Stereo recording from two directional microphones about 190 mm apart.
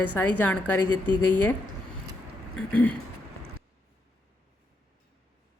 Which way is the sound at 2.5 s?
10° left (ahead or behind).